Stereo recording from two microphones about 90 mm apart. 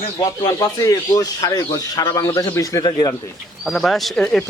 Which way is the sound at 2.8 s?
45° left (ahead or behind).